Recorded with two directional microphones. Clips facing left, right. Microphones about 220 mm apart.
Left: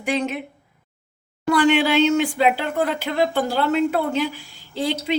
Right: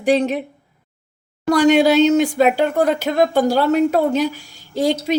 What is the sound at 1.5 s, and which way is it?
Speech, 40° right (ahead or behind).